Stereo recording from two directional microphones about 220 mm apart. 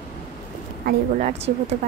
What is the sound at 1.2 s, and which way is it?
Speech, 30° right (ahead or behind).